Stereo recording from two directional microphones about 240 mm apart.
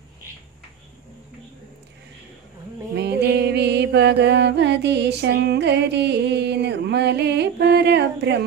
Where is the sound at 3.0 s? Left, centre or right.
Right.